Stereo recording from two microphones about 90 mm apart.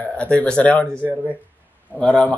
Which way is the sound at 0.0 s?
15° left (ahead or behind).